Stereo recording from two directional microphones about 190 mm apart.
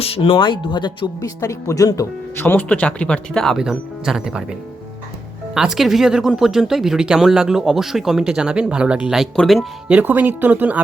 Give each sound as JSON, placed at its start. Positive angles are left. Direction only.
{"t": 0.0, "sound": "speech", "side_deg": 30}
{"t": 5.5, "sound": "speech", "side_deg": 0}